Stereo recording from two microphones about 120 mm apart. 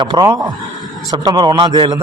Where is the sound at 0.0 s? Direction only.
35° right (ahead or behind).